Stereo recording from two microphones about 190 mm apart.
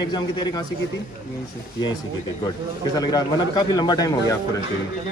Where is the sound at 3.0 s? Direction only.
20° left (ahead or behind).